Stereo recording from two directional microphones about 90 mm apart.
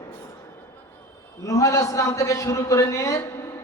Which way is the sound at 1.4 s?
35° left (ahead or behind).